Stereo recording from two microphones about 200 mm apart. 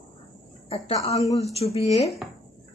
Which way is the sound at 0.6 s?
30° left (ahead or behind).